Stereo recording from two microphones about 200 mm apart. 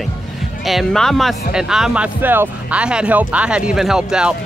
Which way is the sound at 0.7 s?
Centre (ahead or behind).